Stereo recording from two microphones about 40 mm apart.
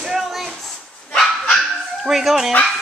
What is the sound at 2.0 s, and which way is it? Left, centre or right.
Speech, centre.